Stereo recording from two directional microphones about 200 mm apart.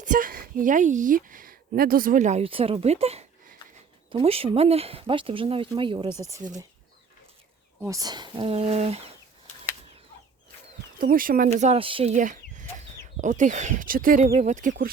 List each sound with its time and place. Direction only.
0.0 s a woman's voice: 40° right (ahead or behind); by 6.1 s 25° right (ahead or behind)
7.9 s speech: 20° right (ahead or behind)
11.0 s a woman's voice: 45° right (ahead or behind); by 12.1 s 25° right (ahead or behind)
12.1 s chicken: 40° right (ahead or behind)
13.1 s a woman's voice: 40° right (ahead or behind)